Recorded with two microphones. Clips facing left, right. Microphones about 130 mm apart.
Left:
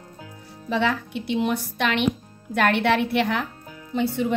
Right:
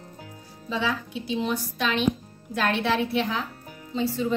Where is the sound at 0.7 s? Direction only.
65° left (ahead or behind).